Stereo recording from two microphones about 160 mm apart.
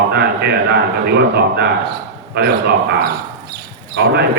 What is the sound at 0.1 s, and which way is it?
A man's voice, 90° right.